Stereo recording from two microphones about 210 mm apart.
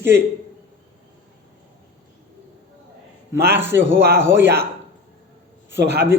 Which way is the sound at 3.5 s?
10° right (ahead or behind).